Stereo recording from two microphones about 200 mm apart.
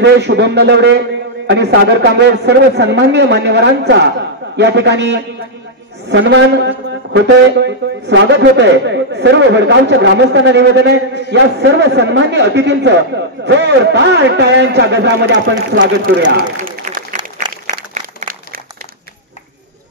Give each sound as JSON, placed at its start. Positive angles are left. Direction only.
{"t": 0.0, "sound": "a man's voice", "side_deg": -60}
{"t": 16.3, "sound": "applause", "side_deg": -45}